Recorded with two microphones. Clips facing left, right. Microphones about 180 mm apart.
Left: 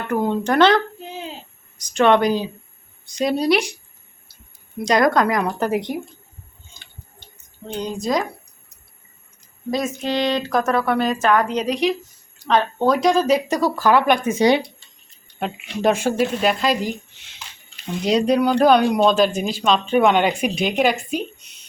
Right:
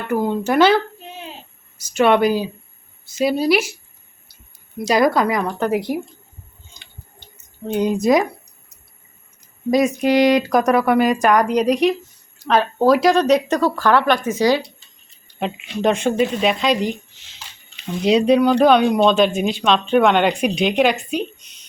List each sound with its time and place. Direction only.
0.1 s speech: 5° right (ahead or behind)
1.8 s speech: 5° right (ahead or behind)
4.8 s speech: 5° right (ahead or behind)
7.8 s speech: 5° right (ahead or behind)
9.6 s speech: 15° right (ahead or behind); by 14.6 s 25° left (ahead or behind)
15.4 s speech: 5° left (ahead or behind)